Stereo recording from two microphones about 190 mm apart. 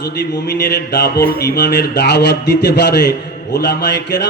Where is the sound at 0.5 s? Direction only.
60° left (ahead or behind).